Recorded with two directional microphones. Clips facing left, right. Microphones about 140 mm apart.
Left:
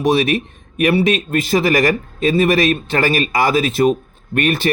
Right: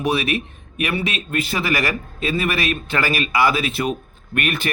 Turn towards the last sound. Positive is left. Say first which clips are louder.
# left 6 dB
turn(degrees=35)  # may be behind; listen again after turning